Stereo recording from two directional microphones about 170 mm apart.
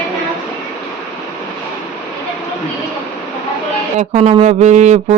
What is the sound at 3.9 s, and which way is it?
Speech, 40° right (ahead or behind).